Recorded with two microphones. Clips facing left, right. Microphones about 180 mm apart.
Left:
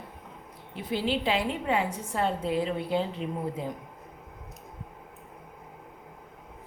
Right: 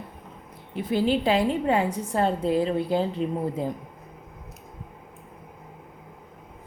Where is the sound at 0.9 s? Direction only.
45° right (ahead or behind).